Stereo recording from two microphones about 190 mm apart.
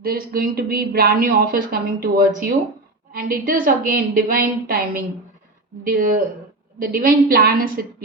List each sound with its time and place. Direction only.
0.0 s speech: 50° right (ahead or behind)